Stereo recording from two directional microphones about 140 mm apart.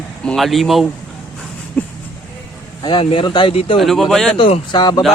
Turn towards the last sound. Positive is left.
turn(degrees=30)  # may be behind; listen again after turning